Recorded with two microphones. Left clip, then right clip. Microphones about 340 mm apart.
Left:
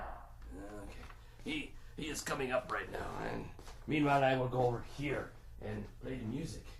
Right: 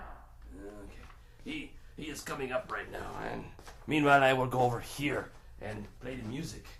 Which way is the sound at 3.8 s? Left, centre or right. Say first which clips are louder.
Right 6 dB; right.